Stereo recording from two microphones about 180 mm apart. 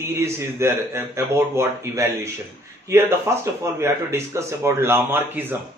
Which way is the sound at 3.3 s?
15° right (ahead or behind).